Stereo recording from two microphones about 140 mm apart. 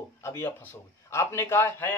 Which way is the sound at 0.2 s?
15° left (ahead or behind).